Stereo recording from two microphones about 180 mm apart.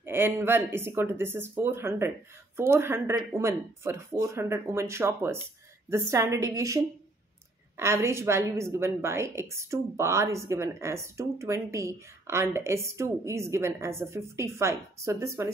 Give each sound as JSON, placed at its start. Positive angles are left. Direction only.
{"t": 0.0, "sound": "a woman's voice", "side_deg": -15}